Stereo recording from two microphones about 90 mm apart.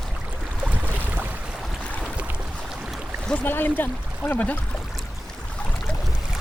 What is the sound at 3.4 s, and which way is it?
Speech, 20° left (ahead or behind).